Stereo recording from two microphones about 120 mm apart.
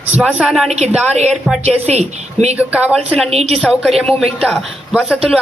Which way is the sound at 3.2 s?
60° right (ahead or behind).